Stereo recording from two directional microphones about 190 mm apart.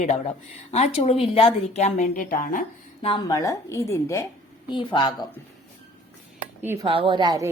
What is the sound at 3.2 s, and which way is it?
A woman's voice, 15° left (ahead or behind).